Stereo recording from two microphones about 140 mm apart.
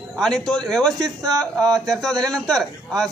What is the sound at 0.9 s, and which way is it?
Speech, 25° right (ahead or behind).